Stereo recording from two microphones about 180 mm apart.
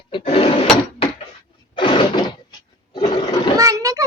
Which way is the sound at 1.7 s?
25° left (ahead or behind).